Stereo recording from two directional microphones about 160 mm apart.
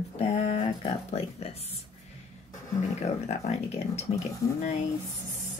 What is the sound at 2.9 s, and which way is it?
Speech, 45° left (ahead or behind).